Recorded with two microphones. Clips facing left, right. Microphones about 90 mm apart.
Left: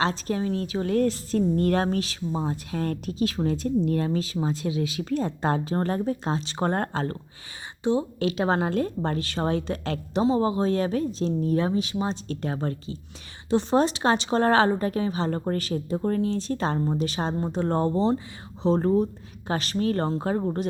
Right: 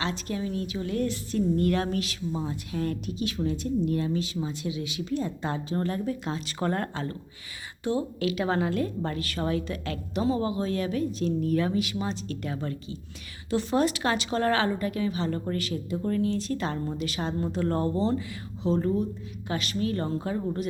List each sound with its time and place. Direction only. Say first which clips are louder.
0.0 s a woman's voice: left 5 dB; 35° left (ahead or behind)
1.0 s a woman's voice: left 3 dB; 40° left (ahead or behind)
7.9 s speech: left 3 dB; 25° left (ahead or behind)
8.3 s a woman's voice: left 3 dB; 35° left (ahead or behind)
18.8 s a woman's voice: left 4 dB; 35° left (ahead or behind)